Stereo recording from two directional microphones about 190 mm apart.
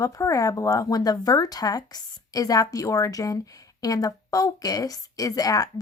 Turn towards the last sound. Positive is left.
turn(degrees=20)  # may be behind; listen again after turning